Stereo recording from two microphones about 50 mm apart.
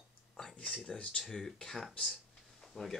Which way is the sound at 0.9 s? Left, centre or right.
Centre.